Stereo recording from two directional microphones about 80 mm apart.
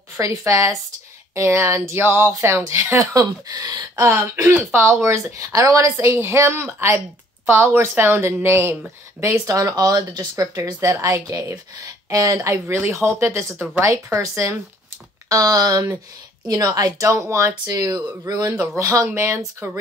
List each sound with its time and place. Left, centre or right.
0.2 s speech: right
3.2 s a woman's voice: right
4.0 s a woman's voice: right
4.7 s a woman's voice: right
9.6 s a woman's voice: right
18.8 s speech: right